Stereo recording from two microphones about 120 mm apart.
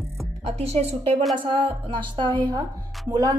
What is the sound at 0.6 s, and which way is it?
Speech, 60° right (ahead or behind).